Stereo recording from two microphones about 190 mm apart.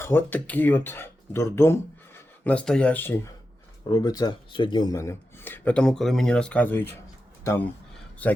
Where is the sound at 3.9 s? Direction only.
20° left (ahead or behind).